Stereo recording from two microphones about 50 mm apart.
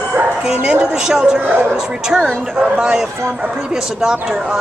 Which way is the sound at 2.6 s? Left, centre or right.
Centre.